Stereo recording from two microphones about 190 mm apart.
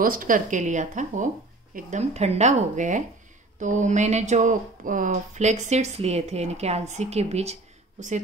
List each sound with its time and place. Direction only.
0.0 s speech: 45° right (ahead or behind)